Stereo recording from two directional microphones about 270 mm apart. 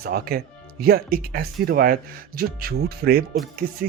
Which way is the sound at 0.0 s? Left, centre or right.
Right.